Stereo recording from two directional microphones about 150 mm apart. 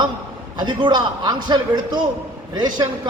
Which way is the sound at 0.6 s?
30° right (ahead or behind).